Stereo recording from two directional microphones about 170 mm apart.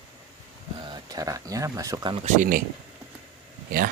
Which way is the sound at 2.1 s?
45° right (ahead or behind).